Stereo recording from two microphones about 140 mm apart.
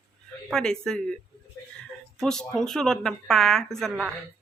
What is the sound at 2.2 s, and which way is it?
Speech, 5° left (ahead or behind).